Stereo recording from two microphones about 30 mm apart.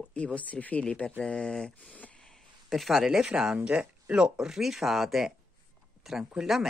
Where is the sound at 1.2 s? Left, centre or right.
Left.